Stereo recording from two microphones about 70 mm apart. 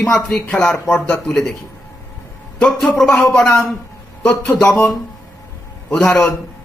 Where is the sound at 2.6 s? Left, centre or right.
Centre.